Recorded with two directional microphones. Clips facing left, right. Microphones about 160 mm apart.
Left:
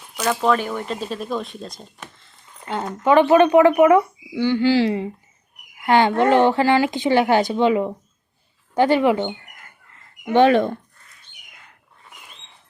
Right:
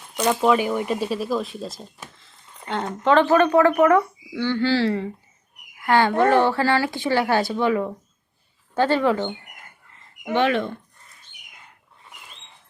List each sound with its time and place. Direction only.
0.2 s speech: 10° right (ahead or behind); by 9.2 s 15° left (ahead or behind)
10.3 s speech: 35° left (ahead or behind)